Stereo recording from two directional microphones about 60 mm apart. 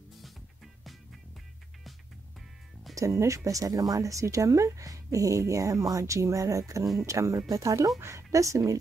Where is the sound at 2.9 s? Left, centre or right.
Right.